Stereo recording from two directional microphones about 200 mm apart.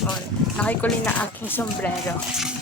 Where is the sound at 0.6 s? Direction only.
5° left (ahead or behind).